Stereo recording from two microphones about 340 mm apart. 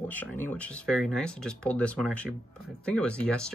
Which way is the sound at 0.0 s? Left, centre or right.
Centre.